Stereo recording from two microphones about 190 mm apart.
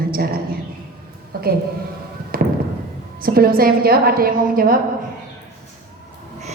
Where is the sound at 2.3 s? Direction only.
50° right (ahead or behind).